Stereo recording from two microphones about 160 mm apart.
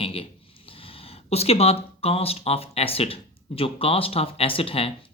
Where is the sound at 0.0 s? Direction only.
35° left (ahead or behind).